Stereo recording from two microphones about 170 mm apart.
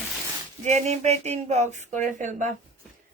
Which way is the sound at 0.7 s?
40° right (ahead or behind).